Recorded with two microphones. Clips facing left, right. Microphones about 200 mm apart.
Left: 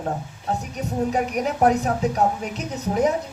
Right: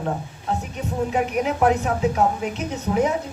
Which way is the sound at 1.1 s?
40° left (ahead or behind).